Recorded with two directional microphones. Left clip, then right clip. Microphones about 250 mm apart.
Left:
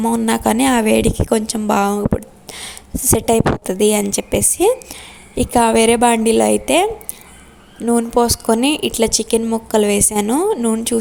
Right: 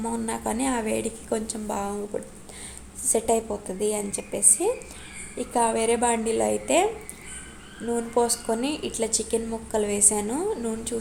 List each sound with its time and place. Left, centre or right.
0.0 s a woman's voice: left
7.9 s a woman's voice: left